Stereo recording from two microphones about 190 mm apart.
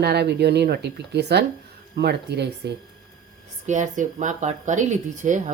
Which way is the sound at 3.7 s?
40° right (ahead or behind).